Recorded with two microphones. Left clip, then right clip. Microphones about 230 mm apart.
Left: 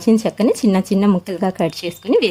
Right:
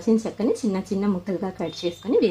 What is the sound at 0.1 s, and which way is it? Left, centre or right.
A woman's voice, left.